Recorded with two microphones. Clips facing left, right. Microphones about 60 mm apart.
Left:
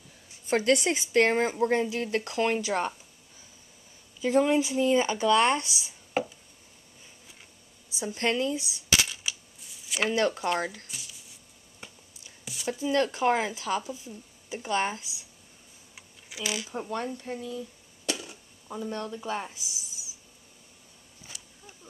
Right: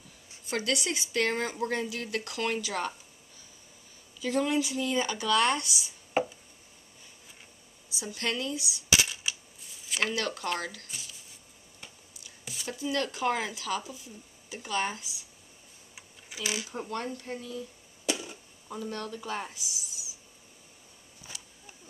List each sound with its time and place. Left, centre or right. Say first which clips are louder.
0.5 s a woman's voice: left 7 dB; left
4.2 s a woman's voice: left 5 dB; left
7.9 s a woman's voice: left 5 dB; left
9.0 s coin: even; centre
10.0 s a woman's voice: left 6 dB; left
10.9 s a sound: even; centre
12.5 s a sound: left 1 dB; centre
12.9 s a woman's voice: left 5 dB; left
15.9 s a sound: left 1 dB; centre
16.4 s speech: left 1 dB; centre
16.9 s speech: left 2 dB; centre
18.0 s arrow: right 1 dB; centre
18.7 s speech: left 2 dB; centre